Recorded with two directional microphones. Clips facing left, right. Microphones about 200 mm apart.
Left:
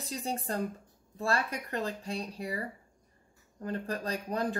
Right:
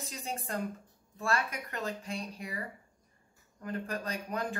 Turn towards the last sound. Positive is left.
turn(degrees=35)  # may be behind; listen again after turning